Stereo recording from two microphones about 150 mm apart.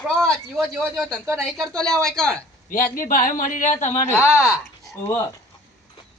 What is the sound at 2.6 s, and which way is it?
A man's voice, 65° left (ahead or behind).